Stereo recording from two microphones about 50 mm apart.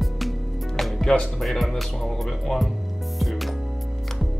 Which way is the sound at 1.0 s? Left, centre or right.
Centre.